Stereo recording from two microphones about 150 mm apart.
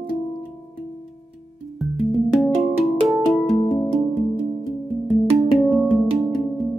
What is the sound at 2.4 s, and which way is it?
Music, centre (ahead or behind).